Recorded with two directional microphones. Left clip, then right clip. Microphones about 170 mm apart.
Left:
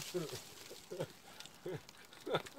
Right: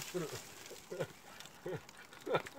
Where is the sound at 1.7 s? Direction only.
75° left (ahead or behind).